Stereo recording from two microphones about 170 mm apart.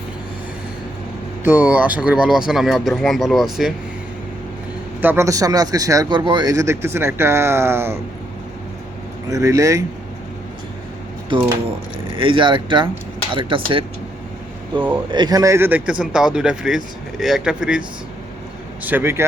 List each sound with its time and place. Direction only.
1.5 s a man's voice: 10° right (ahead or behind)
4.9 s a man's voice: 15° right (ahead or behind)
9.3 s speech: 20° right (ahead or behind)
11.3 s speech: 30° right (ahead or behind)
15.1 s speech: 25° right (ahead or behind); by 17.8 s 5° right (ahead or behind)
18.9 s a man's voice: 10° right (ahead or behind)